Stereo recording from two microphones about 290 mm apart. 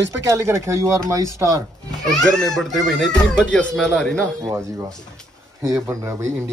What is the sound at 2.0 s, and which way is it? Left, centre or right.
Speech, centre.